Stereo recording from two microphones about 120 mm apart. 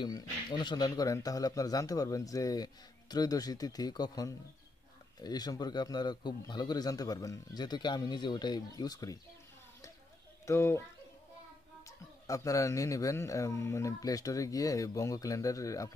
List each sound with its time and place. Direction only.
0.0 s speech: 40° left (ahead or behind)
10.4 s speech: 25° left (ahead or behind)
11.8 s speech: 25° left (ahead or behind)